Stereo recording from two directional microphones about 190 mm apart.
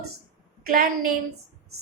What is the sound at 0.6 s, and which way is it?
Speech, 50° right (ahead or behind).